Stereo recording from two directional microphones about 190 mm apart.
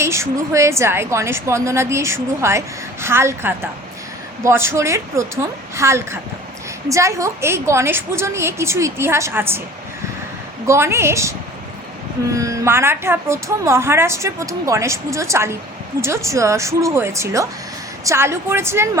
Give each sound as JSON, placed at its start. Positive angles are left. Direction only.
{"t": 0.0, "sound": "a woman's voice", "side_deg": -15}
{"t": 10.7, "sound": "a woman's voice", "side_deg": -15}